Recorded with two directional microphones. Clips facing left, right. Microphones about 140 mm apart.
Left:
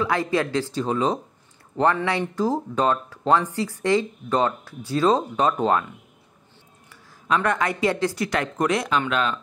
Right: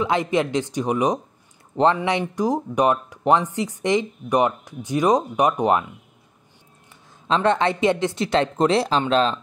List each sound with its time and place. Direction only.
0.0 s speech: 20° right (ahead or behind)
6.9 s speech: 25° right (ahead or behind)